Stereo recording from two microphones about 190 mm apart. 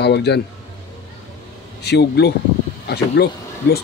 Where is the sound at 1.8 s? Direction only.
60° left (ahead or behind).